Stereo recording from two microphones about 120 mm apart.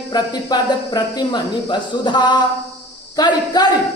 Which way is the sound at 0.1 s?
35° left (ahead or behind).